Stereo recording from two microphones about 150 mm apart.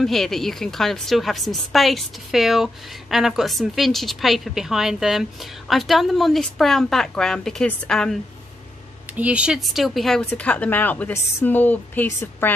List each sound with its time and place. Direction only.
0.0 s a woman's voice: centre (ahead or behind)
9.0 s speech: 10° right (ahead or behind); by 12.5 s 15° left (ahead or behind)